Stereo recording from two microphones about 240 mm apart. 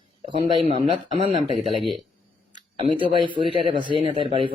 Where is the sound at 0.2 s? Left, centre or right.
Right.